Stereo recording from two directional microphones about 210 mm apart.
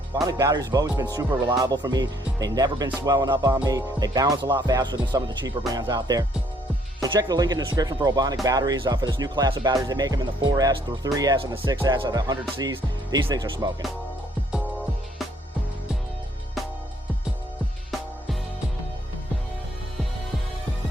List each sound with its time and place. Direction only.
0.3 s speech: 15° right (ahead or behind)